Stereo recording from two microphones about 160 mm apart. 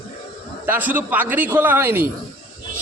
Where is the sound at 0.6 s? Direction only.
10° right (ahead or behind).